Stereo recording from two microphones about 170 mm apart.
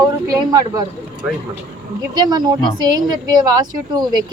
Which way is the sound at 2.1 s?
25° right (ahead or behind).